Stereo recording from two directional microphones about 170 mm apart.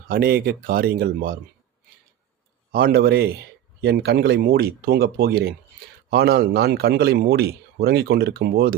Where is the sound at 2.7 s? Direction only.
60° right (ahead or behind).